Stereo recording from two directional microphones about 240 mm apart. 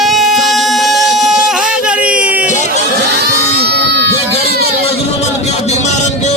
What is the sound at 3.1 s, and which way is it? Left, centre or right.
Crowd, right.